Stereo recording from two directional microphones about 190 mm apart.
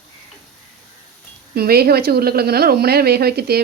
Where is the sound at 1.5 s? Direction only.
55° right (ahead or behind).